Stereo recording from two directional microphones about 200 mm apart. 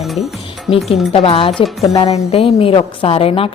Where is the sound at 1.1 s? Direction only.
30° left (ahead or behind).